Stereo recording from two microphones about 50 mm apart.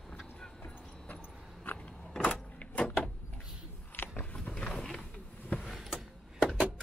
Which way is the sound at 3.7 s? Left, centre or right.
Left.